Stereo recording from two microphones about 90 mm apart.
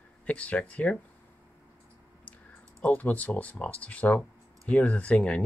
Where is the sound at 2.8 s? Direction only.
20° left (ahead or behind).